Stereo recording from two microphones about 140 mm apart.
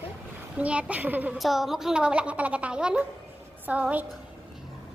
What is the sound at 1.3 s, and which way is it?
A woman's voice, centre (ahead or behind).